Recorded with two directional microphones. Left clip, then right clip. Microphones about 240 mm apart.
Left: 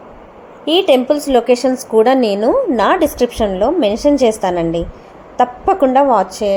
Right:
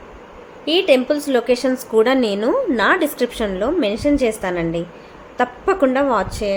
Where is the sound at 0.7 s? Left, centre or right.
Centre.